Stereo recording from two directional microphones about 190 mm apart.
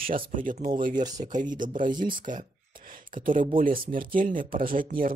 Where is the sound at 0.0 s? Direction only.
45° right (ahead or behind).